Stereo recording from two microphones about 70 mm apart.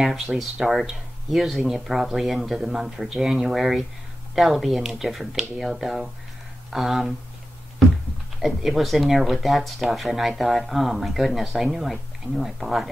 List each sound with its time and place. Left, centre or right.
0.0 s speech: centre
8.4 s speech: centre